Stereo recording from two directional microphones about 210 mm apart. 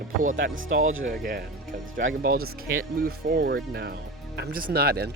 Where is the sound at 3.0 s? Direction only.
45° right (ahead or behind).